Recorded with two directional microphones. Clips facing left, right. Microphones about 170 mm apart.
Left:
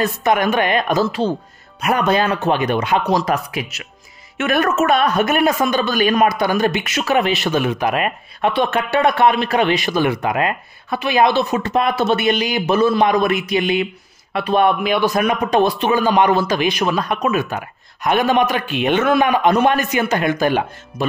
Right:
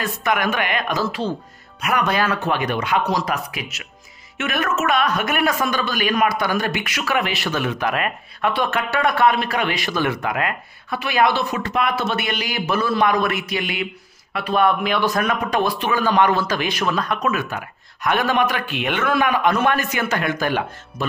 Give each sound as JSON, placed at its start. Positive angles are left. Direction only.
{"t": 0.0, "sound": "speech", "side_deg": 30}